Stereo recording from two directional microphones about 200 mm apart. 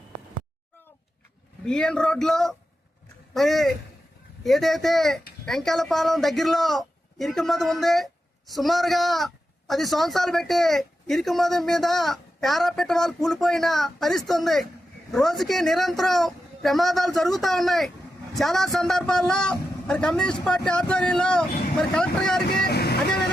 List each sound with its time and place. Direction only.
1.6 s a man's voice: 5° left (ahead or behind)
22.6 s speech: 55° left (ahead or behind)